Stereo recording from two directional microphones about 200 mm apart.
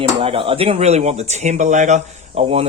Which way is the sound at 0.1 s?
30° right (ahead or behind).